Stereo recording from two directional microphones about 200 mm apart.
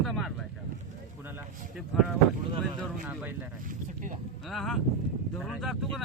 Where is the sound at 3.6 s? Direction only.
40° right (ahead or behind).